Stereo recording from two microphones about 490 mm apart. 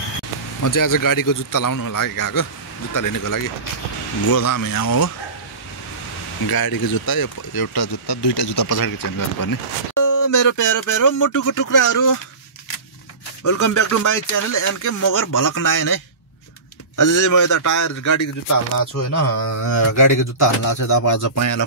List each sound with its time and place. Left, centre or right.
0.6 s speech: left
6.5 s speech: left
13.4 s speech: left